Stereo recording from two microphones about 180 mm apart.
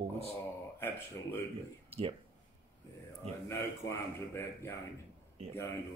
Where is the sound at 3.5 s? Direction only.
15° left (ahead or behind).